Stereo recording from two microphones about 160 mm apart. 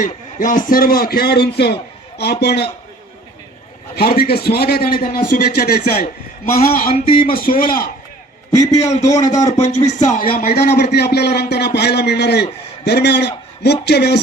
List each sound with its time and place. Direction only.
0.0 s a man's voice: 55° left (ahead or behind); by 2.6 s 90° left
3.9 s a man's voice: 70° left (ahead or behind)
7.2 s speech: 65° left (ahead or behind)
8.5 s a man's voice: 45° left (ahead or behind)
10.5 s a man's voice: 90° left